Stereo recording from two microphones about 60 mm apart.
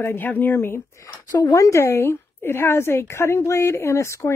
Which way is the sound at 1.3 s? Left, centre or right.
Left.